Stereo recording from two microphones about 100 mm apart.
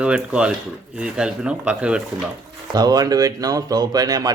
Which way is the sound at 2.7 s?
40° right (ahead or behind).